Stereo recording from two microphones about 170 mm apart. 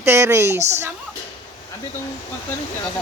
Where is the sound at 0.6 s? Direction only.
40° right (ahead or behind).